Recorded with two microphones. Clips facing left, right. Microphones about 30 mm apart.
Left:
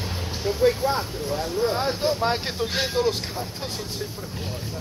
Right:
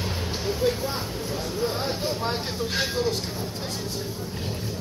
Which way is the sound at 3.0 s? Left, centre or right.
Left.